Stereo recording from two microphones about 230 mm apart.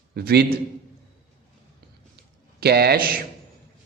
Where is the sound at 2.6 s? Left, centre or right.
Right.